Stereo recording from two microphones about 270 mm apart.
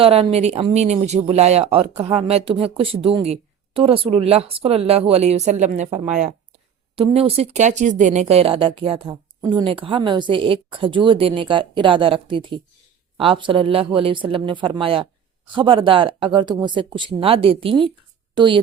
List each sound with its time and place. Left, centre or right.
0.0 s a woman's voice: right